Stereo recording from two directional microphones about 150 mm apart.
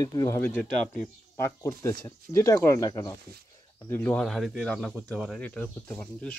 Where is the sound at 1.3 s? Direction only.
20° left (ahead or behind).